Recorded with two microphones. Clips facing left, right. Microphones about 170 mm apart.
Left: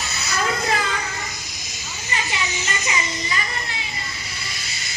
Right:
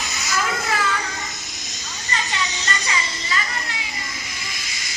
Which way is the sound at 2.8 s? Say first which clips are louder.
Left 1 dB; 20° left (ahead or behind).